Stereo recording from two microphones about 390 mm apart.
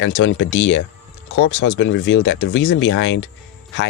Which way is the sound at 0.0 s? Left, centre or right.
Left.